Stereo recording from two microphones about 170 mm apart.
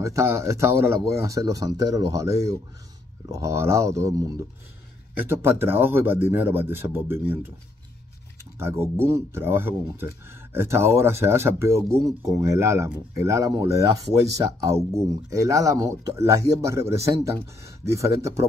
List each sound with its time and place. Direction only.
0.0 s speech: 15° right (ahead or behind)
8.5 s speech: 15° right (ahead or behind)